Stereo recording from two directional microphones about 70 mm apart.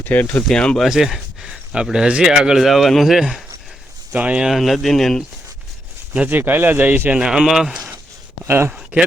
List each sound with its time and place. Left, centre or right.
0.0 s speech: left
0.4 s speech: centre
0.8 s speech: centre
4.1 s speech: centre
4.4 s speech: centre
6.2 s speech: right
7.2 s speech: centre
8.4 s speech: right
8.7 s speech: centre